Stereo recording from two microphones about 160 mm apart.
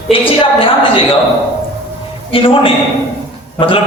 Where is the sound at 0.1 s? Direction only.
35° left (ahead or behind).